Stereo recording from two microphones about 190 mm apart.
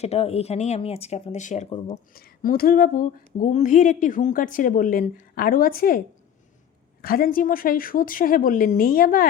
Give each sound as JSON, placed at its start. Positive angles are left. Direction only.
{"t": 0.0, "sound": "speech", "side_deg": 35}
{"t": 2.1, "sound": "speech", "side_deg": 50}
{"t": 7.0, "sound": "speech", "side_deg": 50}